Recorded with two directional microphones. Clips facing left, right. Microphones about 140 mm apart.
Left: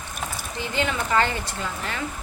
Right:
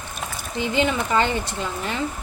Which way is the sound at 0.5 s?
20° right (ahead or behind).